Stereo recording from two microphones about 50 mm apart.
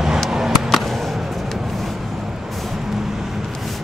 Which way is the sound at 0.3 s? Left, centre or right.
Centre.